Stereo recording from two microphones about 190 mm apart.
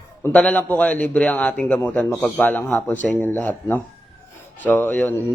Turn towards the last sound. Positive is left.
turn(degrees=10)  # may be behind; listen again after turning